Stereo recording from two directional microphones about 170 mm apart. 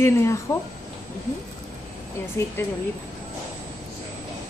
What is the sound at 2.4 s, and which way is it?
Speech, 15° left (ahead or behind).